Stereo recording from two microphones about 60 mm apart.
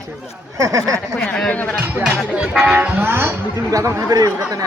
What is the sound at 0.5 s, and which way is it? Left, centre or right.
Speech, right.